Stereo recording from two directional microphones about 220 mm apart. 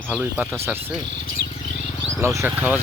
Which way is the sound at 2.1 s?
10° right (ahead or behind).